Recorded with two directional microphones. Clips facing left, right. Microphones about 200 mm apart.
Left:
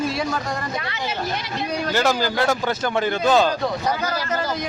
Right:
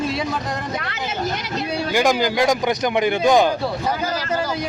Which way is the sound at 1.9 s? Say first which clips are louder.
Right 3 dB; 15° right (ahead or behind).